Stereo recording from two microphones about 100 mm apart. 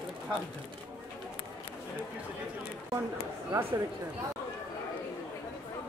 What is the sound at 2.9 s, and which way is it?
Speech, 30° right (ahead or behind).